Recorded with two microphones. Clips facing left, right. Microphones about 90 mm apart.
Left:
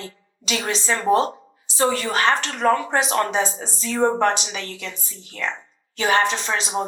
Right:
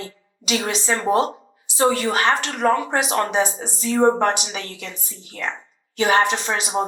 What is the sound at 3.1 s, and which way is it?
Speech, 35° right (ahead or behind).